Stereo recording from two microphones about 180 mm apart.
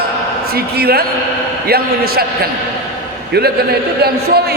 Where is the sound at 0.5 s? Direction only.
60° right (ahead or behind).